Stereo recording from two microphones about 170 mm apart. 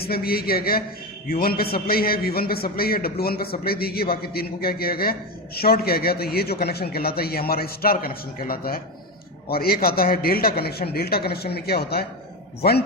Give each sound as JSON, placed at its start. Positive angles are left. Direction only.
{"t": 0.0, "sound": "a man's voice", "side_deg": 65}